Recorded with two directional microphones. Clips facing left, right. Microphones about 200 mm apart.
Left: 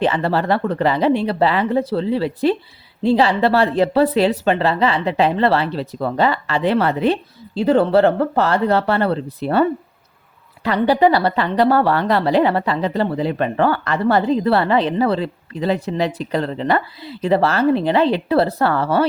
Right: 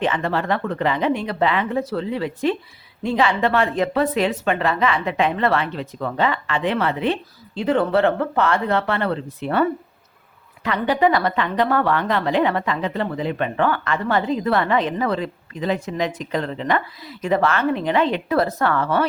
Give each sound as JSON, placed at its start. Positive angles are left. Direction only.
{"t": 0.0, "sound": "a woman's voice", "side_deg": 35}